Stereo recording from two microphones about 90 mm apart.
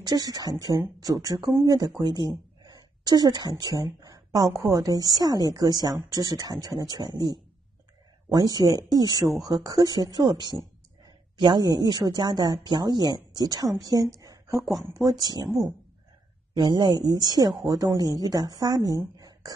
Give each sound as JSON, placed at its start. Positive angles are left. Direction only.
{"t": 0.0, "sound": "a woman's voice", "side_deg": -45}
{"t": 16.5, "sound": "a woman's voice", "side_deg": -60}